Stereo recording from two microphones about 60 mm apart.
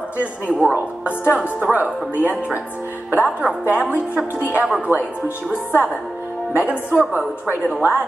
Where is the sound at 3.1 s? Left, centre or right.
Right.